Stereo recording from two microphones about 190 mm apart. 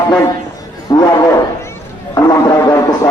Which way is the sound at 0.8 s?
20° left (ahead or behind).